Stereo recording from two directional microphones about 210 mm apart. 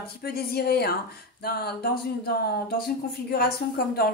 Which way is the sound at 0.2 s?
45° left (ahead or behind).